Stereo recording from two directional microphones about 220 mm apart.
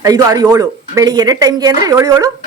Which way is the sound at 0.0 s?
15° right (ahead or behind).